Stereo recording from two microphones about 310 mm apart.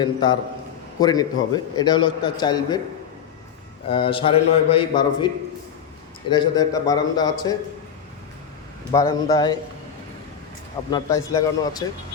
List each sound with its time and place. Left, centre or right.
0.0 s a man's voice: centre
3.8 s a man's voice: centre
8.9 s a man's voice: centre
10.9 s a man's voice: centre